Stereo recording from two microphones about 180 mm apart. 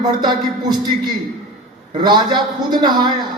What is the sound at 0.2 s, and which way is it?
Speech, 25° right (ahead or behind).